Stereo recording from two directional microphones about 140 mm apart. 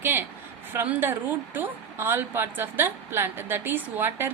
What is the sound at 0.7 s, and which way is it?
A woman's voice, 15° right (ahead or behind).